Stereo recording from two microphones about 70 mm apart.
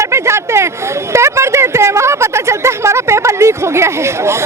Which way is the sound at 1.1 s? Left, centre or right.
Right.